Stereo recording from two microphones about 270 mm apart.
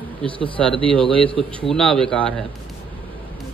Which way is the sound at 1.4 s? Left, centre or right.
Centre.